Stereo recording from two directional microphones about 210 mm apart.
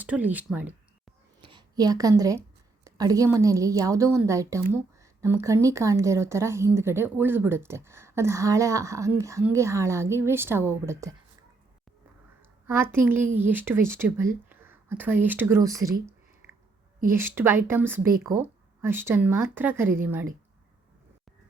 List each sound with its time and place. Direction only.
0.0 s speech: 5° right (ahead or behind)
1.4 s a woman's voice: 20° right (ahead or behind)
12.4 s a woman's voice: 10° right (ahead or behind)
17.1 s a woman's voice: 10° right (ahead or behind)